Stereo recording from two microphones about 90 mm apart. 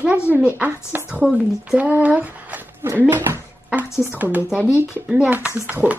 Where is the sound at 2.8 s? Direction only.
25° right (ahead or behind).